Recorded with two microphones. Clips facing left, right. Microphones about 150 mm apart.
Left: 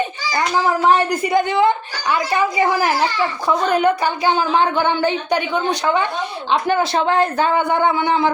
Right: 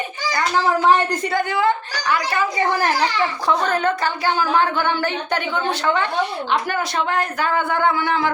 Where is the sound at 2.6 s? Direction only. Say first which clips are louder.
Left 2 dB; 5° left (ahead or behind).